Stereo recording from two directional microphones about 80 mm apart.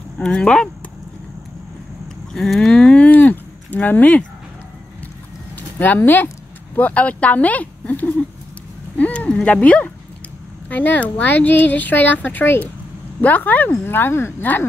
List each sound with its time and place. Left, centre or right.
0.2 s speech: centre
2.3 s speech: centre; by 4.2 s left
5.8 s speech: left